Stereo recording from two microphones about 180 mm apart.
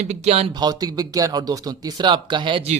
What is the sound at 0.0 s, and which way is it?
Speech, 40° right (ahead or behind).